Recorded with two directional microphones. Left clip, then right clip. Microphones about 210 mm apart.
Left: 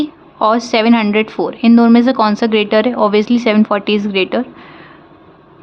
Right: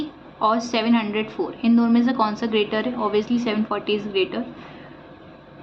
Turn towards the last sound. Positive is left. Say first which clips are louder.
# left 8 dB
turn(degrees=55)  # may be behind; listen again after turning